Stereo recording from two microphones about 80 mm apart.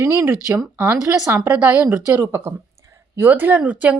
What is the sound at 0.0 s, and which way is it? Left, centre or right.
Speech, right.